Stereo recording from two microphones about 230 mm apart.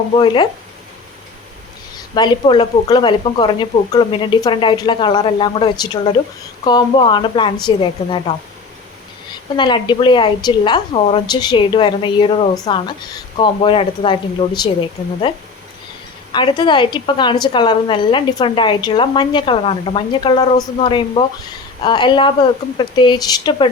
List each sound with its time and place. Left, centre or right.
2.1 s a woman's voice: centre
9.6 s a woman's voice: centre
16.3 s a woman's voice: left